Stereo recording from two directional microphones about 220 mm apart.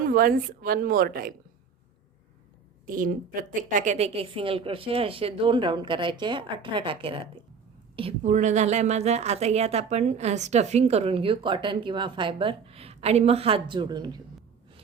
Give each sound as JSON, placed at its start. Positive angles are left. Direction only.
{"t": 0.0, "sound": "a woman's voice", "side_deg": -40}
{"t": 2.8, "sound": "a woman's voice", "side_deg": -40}